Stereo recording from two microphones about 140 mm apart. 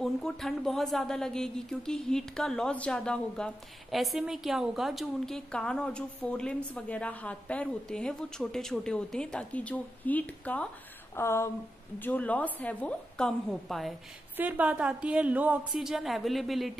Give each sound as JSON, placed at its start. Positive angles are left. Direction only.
{"t": 0.0, "sound": "a woman's voice", "side_deg": 0}
{"t": 14.3, "sound": "a woman's voice", "side_deg": -10}